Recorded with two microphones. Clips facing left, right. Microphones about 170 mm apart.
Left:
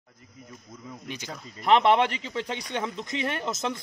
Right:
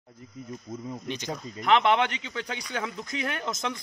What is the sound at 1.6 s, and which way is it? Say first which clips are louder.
A man's voice: left 2 dB; 30° left (ahead or behind).